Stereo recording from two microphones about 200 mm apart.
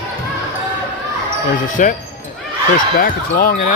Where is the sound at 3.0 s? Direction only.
45° left (ahead or behind).